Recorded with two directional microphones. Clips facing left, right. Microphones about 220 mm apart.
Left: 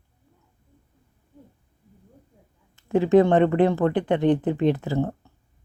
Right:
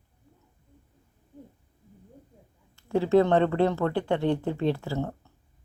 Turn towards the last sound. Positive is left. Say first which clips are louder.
# left 5 dB
turn(degrees=20)  # may be behind; listen again after turning